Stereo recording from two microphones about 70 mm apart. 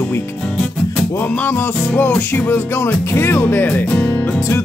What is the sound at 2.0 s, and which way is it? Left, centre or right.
Speech, left.